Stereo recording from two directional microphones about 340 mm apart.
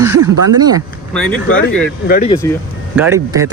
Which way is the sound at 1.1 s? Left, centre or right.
Centre.